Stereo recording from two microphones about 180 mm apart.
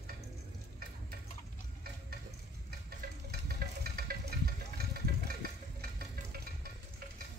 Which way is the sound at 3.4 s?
60° right (ahead or behind).